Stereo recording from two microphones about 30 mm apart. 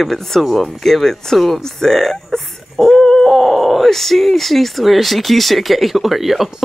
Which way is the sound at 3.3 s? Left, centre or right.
Centre.